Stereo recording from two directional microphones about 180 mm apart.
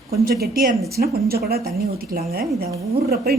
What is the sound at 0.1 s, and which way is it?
A woman's voice, 60° right (ahead or behind).